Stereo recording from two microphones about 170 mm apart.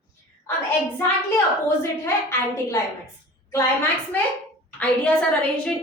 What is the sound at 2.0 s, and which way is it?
Speech, 15° left (ahead or behind).